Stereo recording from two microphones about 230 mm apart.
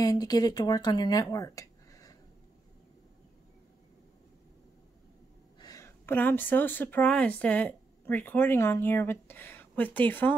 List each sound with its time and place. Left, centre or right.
0.0 s speech: centre
5.6 s speech: centre